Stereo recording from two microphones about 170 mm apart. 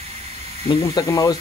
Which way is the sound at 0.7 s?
25° left (ahead or behind).